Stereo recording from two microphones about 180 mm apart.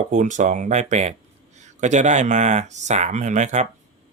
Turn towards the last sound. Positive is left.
turn(degrees=-40)  # may be behind; listen again after turning